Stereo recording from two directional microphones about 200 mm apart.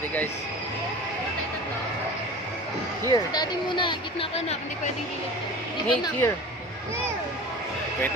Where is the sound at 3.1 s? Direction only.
20° left (ahead or behind).